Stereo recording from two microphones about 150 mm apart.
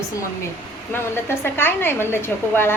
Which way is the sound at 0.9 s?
15° left (ahead or behind).